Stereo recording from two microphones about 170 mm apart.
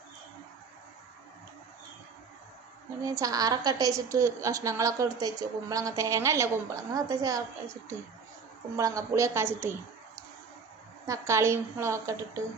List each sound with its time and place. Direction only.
3.0 s a woman's voice: 20° right (ahead or behind)
8.7 s a woman's voice: 20° right (ahead or behind)
11.0 s a woman's voice: 20° right (ahead or behind)